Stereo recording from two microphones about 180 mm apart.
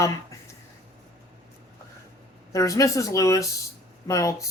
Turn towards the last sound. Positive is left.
turn(degrees=15)  # may be behind; listen again after turning